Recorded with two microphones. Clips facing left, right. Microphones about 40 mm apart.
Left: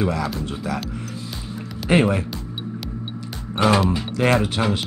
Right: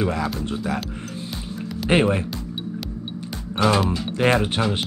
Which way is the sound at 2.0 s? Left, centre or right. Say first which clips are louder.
Left 1 dB; centre.